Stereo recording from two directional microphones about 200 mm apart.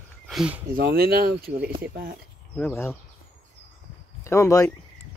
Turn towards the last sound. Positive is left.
turn(degrees=15)  # may be behind; listen again after turning